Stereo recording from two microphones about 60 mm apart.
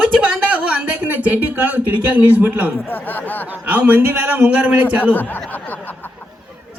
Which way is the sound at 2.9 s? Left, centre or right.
Left.